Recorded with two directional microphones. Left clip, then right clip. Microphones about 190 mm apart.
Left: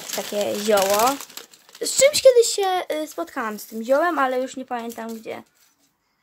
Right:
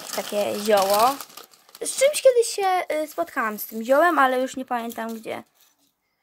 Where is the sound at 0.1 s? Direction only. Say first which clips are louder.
Even; centre (ahead or behind); by 5.5 s 20° right (ahead or behind).